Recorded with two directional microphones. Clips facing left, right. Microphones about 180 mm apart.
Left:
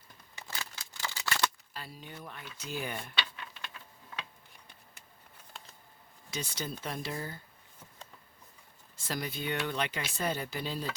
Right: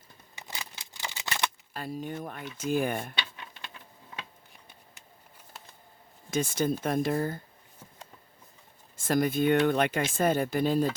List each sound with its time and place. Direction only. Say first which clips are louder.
0.3 s scissors: right 1 dB; 15° right (ahead or behind)
1.7 s speech: right 11 dB; 50° right (ahead or behind)
6.3 s speech: right 11 dB; 50° right (ahead or behind)
9.0 s speech: right 12 dB; 50° right (ahead or behind)